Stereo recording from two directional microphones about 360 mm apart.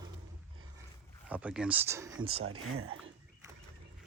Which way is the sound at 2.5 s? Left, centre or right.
Right.